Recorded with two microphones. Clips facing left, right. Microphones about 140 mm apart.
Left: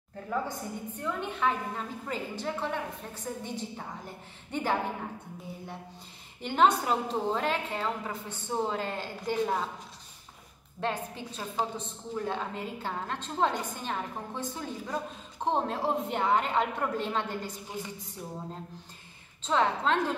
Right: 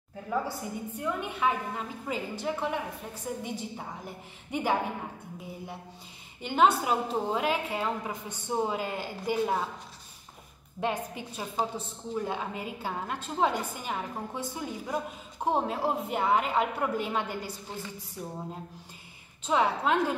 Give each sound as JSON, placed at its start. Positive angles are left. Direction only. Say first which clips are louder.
{"t": 0.3, "sound": "a woman's voice", "louder": "right 1 dB", "side_deg": -10}
{"t": 6.4, "sound": "a woman's voice", "louder": "even", "side_deg": -5}
{"t": 10.8, "sound": "a woman's voice", "louder": "right 2 dB", "side_deg": -15}
{"t": 17.6, "sound": "speech", "louder": "left 1 dB", "side_deg": 15}
{"t": 19.4, "sound": "a woman's voice", "louder": "right 1 dB", "side_deg": -10}